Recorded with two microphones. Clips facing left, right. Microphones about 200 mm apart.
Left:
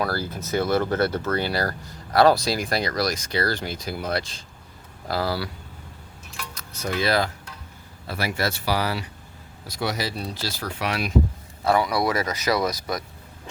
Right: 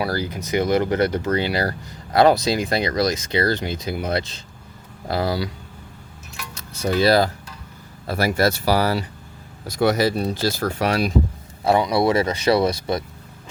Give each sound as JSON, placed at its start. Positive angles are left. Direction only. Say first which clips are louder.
{"t": 0.0, "sound": "speech", "louder": "right 2 dB", "side_deg": -15}
{"t": 6.5, "sound": "keys jangling", "louder": "right 7 dB", "side_deg": -30}
{"t": 7.0, "sound": "speech", "louder": "right 6 dB", "side_deg": -35}
{"t": 11.6, "sound": "speech", "louder": "right 4 dB", "side_deg": -25}